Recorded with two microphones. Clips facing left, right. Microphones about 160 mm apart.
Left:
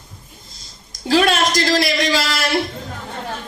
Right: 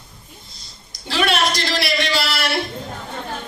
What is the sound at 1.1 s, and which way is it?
A man's voice, 45° left (ahead or behind).